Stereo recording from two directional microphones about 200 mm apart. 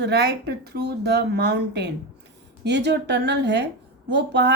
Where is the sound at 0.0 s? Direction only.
55° right (ahead or behind).